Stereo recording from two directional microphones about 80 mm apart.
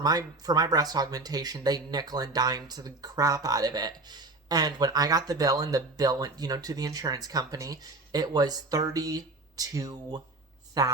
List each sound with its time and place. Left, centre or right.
0.0 s speech: right